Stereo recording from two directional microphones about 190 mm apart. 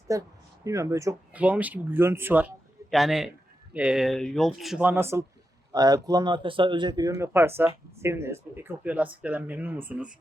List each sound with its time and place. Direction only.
0.1 s speech: 15° right (ahead or behind)